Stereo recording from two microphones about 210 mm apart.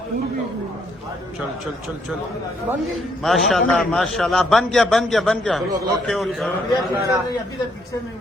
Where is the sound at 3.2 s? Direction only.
Centre (ahead or behind).